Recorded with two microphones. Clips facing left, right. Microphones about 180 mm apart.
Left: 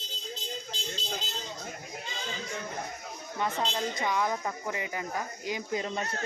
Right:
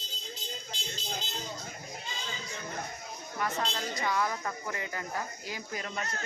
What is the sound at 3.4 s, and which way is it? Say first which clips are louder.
Speech: left 3 dB; 20° left (ahead or behind).